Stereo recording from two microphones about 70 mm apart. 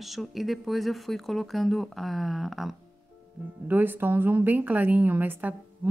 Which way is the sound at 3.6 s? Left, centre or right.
Right.